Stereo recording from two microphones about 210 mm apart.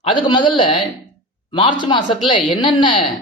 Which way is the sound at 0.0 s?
25° left (ahead or behind).